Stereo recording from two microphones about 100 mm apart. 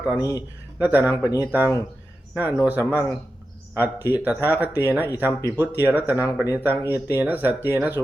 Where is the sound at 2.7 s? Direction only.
15° right (ahead or behind).